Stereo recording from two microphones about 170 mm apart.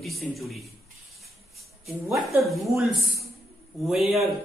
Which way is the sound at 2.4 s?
Centre (ahead or behind).